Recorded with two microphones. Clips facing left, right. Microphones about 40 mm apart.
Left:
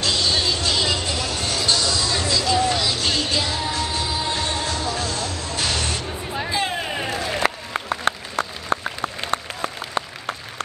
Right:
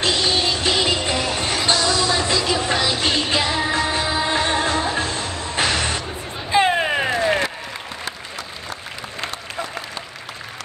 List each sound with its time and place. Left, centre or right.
0.0 s music: right
6.5 s a sound: right
7.9 s applause: left